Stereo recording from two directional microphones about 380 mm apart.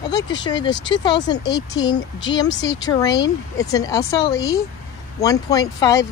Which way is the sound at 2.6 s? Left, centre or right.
Centre.